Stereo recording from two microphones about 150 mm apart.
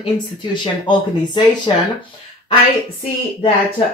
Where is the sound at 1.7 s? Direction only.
35° left (ahead or behind).